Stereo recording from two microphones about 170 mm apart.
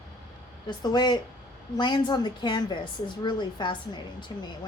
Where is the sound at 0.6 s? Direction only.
25° left (ahead or behind).